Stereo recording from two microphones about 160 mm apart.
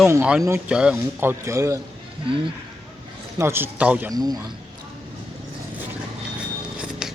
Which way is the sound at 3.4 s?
15° right (ahead or behind).